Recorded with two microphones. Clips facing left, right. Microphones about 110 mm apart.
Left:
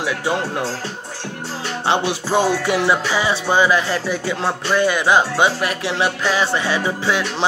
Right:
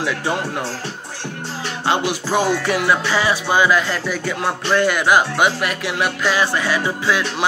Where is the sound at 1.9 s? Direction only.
20° left (ahead or behind).